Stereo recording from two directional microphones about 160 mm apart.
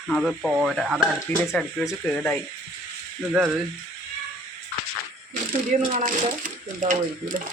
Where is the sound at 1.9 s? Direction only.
15° left (ahead or behind).